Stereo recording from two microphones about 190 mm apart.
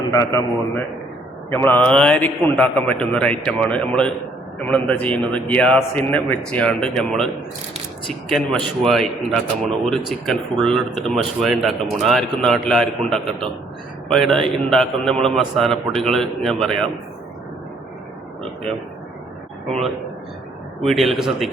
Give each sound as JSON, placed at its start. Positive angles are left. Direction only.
{"t": 0.1, "sound": "a man's voice", "side_deg": 15}
{"t": 1.5, "sound": "a man's voice", "side_deg": 10}
{"t": 20.8, "sound": "a man's voice", "side_deg": 0}